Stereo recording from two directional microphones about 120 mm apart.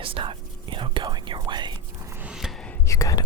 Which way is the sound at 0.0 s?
50° right (ahead or behind).